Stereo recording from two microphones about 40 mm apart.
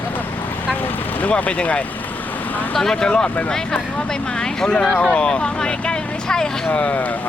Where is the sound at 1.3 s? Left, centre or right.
Left.